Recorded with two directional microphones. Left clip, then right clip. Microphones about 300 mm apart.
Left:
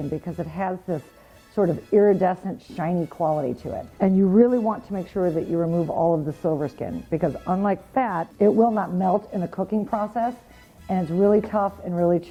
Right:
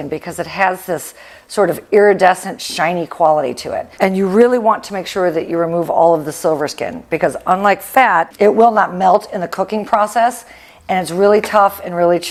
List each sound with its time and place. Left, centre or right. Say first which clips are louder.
0.1 s a woman's voice: right 9 dB; centre